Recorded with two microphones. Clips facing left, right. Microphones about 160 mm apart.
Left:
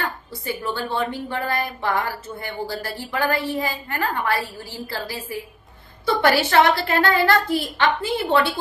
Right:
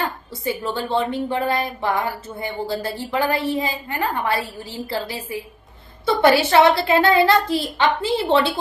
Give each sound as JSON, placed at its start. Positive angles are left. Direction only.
{"t": 0.0, "sound": "a woman's voice", "side_deg": -20}
{"t": 6.2, "sound": "a woman's voice", "side_deg": -20}